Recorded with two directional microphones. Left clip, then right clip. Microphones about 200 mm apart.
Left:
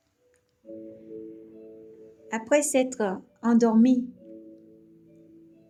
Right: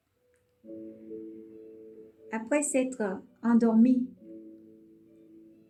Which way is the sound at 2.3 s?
40° left (ahead or behind).